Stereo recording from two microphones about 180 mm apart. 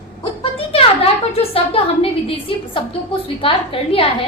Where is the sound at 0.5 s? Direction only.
30° left (ahead or behind).